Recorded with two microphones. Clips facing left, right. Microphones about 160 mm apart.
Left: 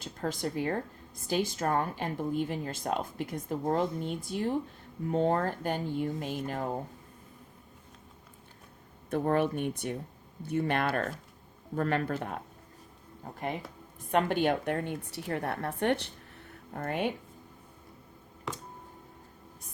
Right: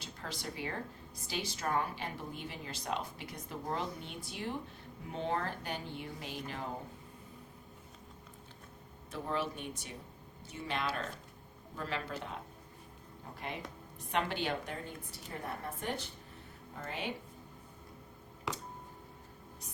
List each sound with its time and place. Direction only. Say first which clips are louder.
0.0 s speech: left 10 dB; 50° left (ahead or behind)
9.0 s speech: left 10 dB; 55° left (ahead or behind)
14.1 s a woman's voice: left 8 dB; 50° left (ahead or behind); by 16.0 s 70° left (ahead or behind)
16.7 s speech: left 10 dB; 55° left (ahead or behind)
18.5 s music: left 1 dB; centre (ahead or behind)